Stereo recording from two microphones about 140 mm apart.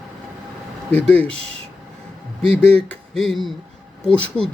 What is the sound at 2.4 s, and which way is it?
Speech, 45° right (ahead or behind).